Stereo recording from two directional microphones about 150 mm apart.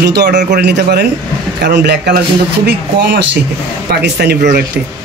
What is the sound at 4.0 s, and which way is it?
Speech, 90° right.